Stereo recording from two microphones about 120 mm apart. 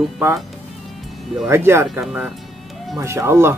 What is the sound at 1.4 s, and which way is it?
Speech, 20° right (ahead or behind).